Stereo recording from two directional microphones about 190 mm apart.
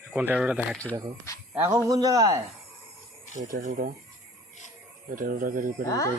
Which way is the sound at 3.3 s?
45° right (ahead or behind).